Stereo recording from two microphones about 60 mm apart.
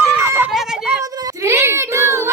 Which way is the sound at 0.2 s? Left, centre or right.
Right.